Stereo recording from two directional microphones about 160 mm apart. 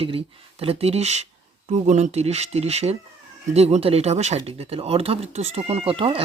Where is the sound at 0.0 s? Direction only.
35° right (ahead or behind).